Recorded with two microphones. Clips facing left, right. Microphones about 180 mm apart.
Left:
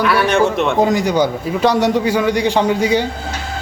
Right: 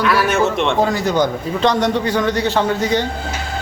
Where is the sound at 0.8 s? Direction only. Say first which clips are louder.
Left 3 dB; 15° left (ahead or behind).